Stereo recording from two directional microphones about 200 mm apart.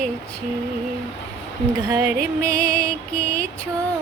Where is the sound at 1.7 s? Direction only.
15° right (ahead or behind).